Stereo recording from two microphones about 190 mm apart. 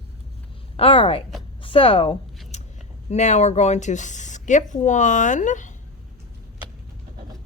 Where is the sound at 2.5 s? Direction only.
35° left (ahead or behind).